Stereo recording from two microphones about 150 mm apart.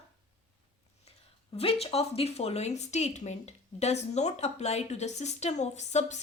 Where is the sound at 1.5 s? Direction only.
40° left (ahead or behind).